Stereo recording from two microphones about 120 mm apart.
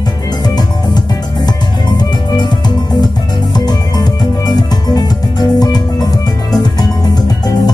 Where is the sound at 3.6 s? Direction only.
35° left (ahead or behind).